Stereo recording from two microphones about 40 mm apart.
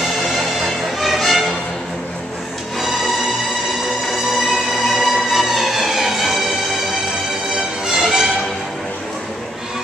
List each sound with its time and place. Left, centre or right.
0.9 s music: centre
4.1 s music: centre
7.5 s music: centre